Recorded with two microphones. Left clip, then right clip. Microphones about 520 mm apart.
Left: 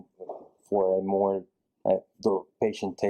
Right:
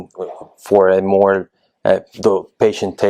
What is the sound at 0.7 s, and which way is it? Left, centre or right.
Speech, right.